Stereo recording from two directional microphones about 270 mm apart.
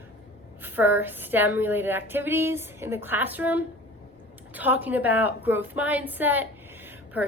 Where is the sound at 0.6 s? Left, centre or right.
Centre.